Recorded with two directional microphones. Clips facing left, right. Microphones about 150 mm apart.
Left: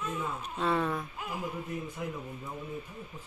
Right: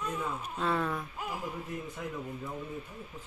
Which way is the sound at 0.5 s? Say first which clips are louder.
Left 2 dB; centre (ahead or behind).